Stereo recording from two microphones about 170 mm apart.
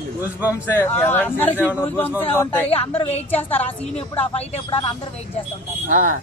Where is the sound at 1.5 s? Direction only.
10° right (ahead or behind).